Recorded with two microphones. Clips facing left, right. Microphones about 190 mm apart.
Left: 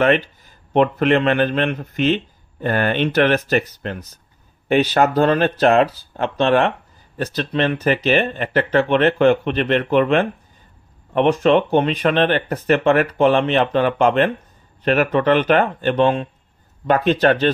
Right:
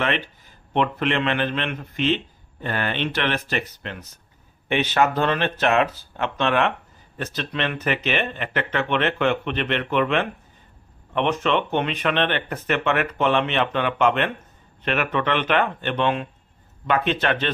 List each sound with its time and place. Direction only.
0.7 s speech: 45° left (ahead or behind)